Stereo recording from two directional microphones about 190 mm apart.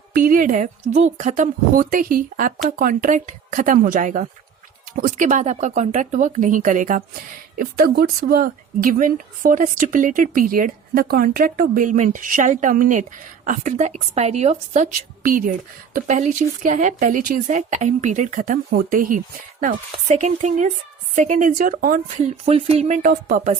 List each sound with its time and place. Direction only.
0.1 s speech: 50° right (ahead or behind)